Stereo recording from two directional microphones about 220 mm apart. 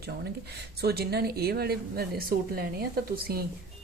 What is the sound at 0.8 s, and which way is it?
Speech, 45° right (ahead or behind).